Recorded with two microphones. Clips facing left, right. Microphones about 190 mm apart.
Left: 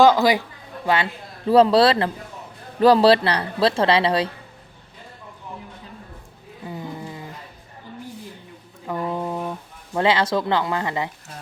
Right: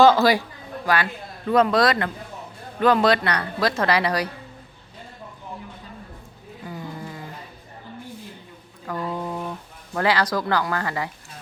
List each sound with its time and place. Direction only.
0.0 s speech: 15° left (ahead or behind)
6.7 s roaring cats: 20° left (ahead or behind)
8.9 s a sound: 20° left (ahead or behind)